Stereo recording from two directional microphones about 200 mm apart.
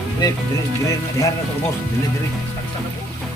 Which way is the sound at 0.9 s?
15° left (ahead or behind).